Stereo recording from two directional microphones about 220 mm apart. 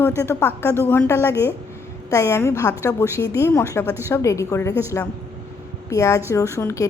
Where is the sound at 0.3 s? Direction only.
10° left (ahead or behind).